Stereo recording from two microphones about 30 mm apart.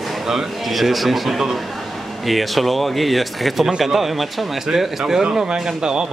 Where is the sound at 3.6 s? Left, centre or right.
Centre.